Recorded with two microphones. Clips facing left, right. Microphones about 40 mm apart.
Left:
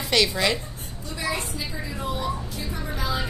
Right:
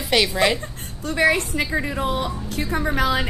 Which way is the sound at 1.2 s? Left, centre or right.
Right.